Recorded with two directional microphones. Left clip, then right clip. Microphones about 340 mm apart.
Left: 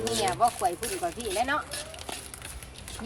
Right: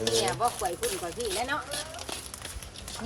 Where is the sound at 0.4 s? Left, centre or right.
Left.